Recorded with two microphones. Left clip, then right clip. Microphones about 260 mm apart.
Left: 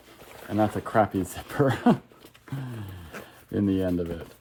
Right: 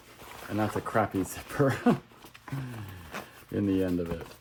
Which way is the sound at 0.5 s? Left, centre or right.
Left.